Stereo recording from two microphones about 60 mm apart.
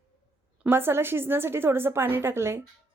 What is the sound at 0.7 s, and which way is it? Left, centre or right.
Speech, right.